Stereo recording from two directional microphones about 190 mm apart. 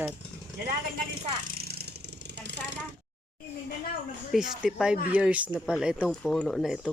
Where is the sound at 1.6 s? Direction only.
55° right (ahead or behind).